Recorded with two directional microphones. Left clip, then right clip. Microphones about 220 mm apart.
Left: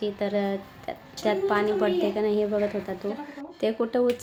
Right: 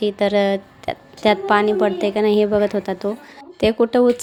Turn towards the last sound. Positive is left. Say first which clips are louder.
# right 9 dB
turn(degrees=-40)  # may be behind; listen again after turning